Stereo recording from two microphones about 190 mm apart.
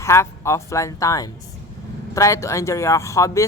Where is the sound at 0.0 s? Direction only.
15° left (ahead or behind).